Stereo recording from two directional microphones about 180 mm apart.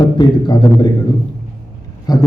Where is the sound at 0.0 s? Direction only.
25° left (ahead or behind).